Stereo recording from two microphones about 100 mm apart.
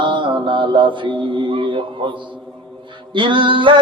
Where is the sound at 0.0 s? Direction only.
55° right (ahead or behind).